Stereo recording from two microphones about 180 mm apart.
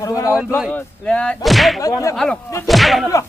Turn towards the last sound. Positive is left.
turn(degrees=0)  # may be behind; listen again after turning